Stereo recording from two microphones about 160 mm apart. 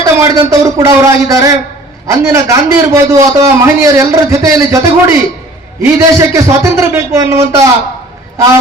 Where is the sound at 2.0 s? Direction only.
20° right (ahead or behind).